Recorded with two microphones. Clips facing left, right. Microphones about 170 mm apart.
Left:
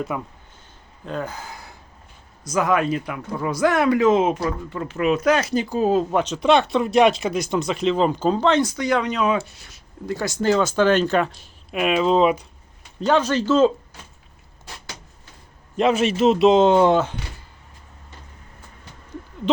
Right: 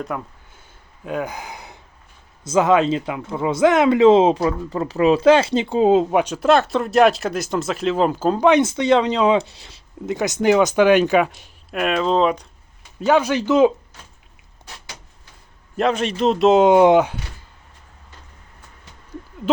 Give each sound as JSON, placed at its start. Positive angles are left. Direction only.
{"t": 0.1, "sound": "speech", "side_deg": 5}
{"t": 1.0, "sound": "speech", "side_deg": -10}
{"t": 6.1, "sound": "speech", "side_deg": -10}
{"t": 8.6, "sound": "speech", "side_deg": -25}
{"t": 11.7, "sound": "speech", "side_deg": 5}
{"t": 13.0, "sound": "speech", "side_deg": -10}
{"t": 15.8, "sound": "speech", "side_deg": 5}
{"t": 16.6, "sound": "speech", "side_deg": -15}